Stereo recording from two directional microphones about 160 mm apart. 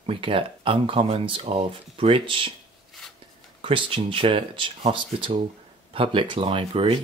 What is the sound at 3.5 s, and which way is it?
Speech, 35° right (ahead or behind).